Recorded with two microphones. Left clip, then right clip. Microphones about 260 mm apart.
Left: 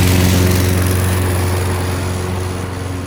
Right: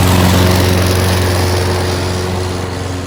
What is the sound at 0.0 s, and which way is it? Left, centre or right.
Vehicle, centre.